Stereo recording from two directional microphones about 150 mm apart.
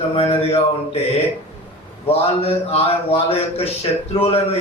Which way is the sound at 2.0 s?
40° left (ahead or behind).